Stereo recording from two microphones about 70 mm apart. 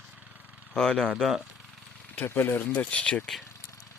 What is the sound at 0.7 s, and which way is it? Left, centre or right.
Speech, centre.